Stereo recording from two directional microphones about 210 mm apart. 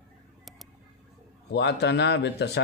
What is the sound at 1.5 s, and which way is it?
Speech, 55° left (ahead or behind).